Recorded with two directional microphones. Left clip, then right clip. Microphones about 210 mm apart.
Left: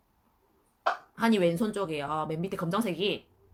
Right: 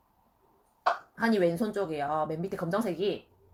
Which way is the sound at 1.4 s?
20° left (ahead or behind).